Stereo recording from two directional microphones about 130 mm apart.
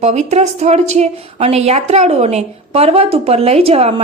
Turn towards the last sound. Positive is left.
turn(degrees=-50)  # may be behind; listen again after turning